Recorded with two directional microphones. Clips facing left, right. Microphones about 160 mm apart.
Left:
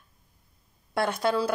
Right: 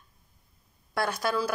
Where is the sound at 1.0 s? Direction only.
25° left (ahead or behind).